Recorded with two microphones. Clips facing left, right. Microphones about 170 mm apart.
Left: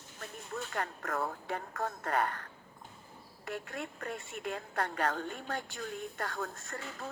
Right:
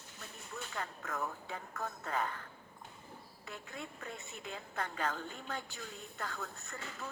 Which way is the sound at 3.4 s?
70° left (ahead or behind).